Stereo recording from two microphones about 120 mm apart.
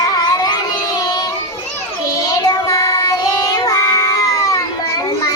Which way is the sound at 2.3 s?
30° left (ahead or behind).